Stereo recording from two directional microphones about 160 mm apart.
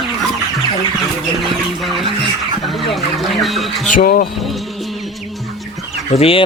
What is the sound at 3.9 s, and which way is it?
Speech, 60° left (ahead or behind).